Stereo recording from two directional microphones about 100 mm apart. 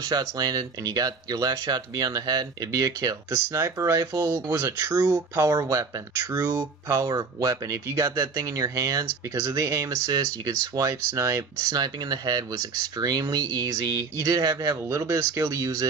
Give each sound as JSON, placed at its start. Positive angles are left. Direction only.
{"t": 0.0, "sound": "speech", "side_deg": -40}
{"t": 6.4, "sound": "speech", "side_deg": -20}
{"t": 7.0, "sound": "speech", "side_deg": -35}
{"t": 11.7, "sound": "speech", "side_deg": -40}